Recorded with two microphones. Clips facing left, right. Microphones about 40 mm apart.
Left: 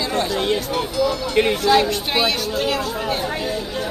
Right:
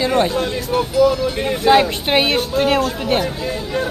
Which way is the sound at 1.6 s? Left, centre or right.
Right.